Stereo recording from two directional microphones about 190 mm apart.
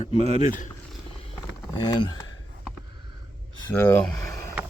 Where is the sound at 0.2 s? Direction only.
35° right (ahead or behind).